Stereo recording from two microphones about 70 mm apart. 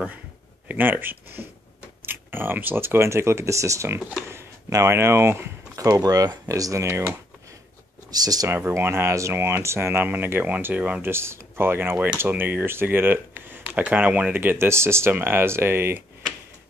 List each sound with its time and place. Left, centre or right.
0.7 s speech: right
4.3 s a sound: right
4.7 s speech: right
5.8 s speech: right
6.4 s speech: right
8.1 s speech: right
8.5 s speech: right
11.1 s speech: right